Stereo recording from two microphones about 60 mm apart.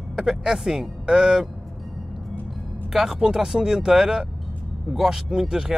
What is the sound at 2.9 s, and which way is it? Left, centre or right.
Speech, centre.